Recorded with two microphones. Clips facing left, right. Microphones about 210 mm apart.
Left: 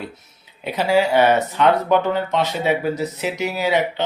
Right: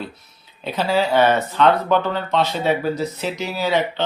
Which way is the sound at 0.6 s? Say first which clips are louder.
Left 2 dB; 15° left (ahead or behind).